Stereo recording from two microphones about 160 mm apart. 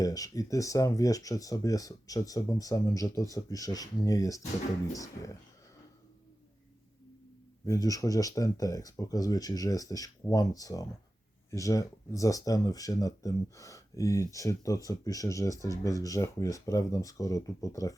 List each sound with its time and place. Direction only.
0.0 s speech: 20° left (ahead or behind)
7.6 s speech: 20° left (ahead or behind)